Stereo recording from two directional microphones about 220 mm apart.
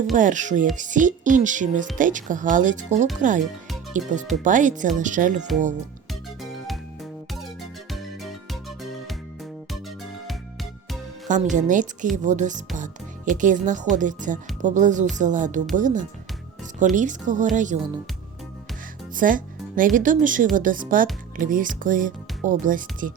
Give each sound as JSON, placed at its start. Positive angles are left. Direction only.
{"t": 0.1, "sound": "speech", "side_deg": -35}
{"t": 7.9, "sound": "music", "side_deg": 0}
{"t": 11.5, "sound": "speech", "side_deg": -35}
{"t": 19.1, "sound": "speech", "side_deg": -40}